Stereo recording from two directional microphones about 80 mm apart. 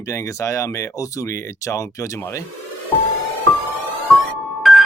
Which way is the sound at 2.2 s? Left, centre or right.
Left.